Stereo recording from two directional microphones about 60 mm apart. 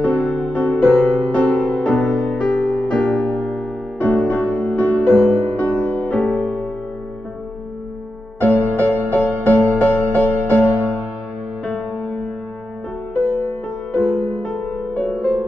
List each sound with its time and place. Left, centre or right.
0.0 s music: left
0.9 s music: centre
1.3 s music: centre
8.4 s music: left
14.0 s music: centre